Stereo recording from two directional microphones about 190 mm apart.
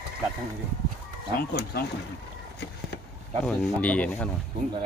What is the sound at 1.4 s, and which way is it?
Speech, 55° left (ahead or behind).